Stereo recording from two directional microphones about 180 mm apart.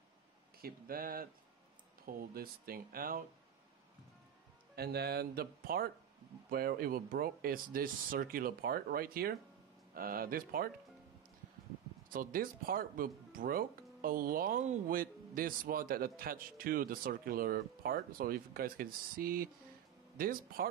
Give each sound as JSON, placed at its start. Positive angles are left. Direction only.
{"t": 0.6, "sound": "a man's voice", "side_deg": -55}
{"t": 4.7, "sound": "a man's voice", "side_deg": -65}
{"t": 12.1, "sound": "a man's voice", "side_deg": -50}